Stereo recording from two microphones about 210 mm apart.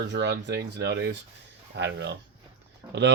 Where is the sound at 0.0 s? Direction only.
55° right (ahead or behind).